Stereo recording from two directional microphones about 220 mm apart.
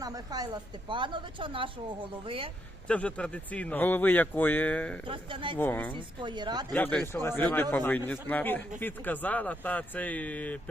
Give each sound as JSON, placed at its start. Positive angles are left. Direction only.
{"t": 0.0, "sound": "a woman's voice", "side_deg": -15}
{"t": 2.8, "sound": "speech", "side_deg": 5}
{"t": 5.0, "sound": "a woman's voice", "side_deg": -25}
{"t": 5.5, "sound": "speech", "side_deg": 10}
{"t": 5.9, "sound": "a woman's voice", "side_deg": -20}
{"t": 6.7, "sound": "speech", "side_deg": 10}